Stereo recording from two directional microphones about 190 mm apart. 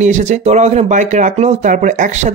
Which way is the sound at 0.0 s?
40° right (ahead or behind).